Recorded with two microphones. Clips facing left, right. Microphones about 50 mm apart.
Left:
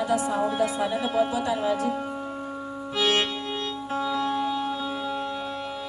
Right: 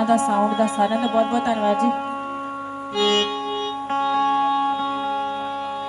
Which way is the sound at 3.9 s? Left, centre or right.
Right.